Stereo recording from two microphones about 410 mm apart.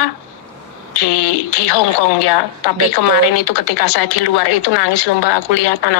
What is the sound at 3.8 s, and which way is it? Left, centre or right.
A woman's voice, left.